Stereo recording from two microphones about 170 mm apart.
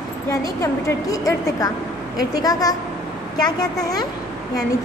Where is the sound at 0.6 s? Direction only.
20° left (ahead or behind).